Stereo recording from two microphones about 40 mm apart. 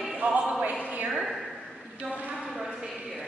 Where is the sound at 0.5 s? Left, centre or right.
Right.